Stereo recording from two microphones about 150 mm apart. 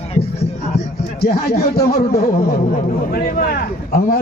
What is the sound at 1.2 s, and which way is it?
Speech, 90° left.